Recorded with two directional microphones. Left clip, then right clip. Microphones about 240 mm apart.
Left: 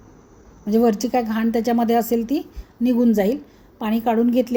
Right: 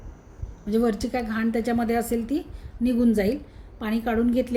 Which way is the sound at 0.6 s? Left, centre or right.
Centre.